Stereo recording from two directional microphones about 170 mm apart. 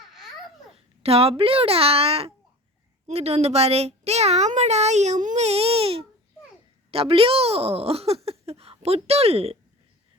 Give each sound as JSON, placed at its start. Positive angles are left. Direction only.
{"t": 0.0, "sound": "babbling", "side_deg": 0}
{"t": 1.0, "sound": "a child's voice", "side_deg": -35}